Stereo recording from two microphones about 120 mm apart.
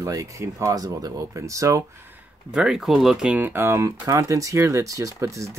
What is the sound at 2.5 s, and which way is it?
Speech, 5° right (ahead or behind).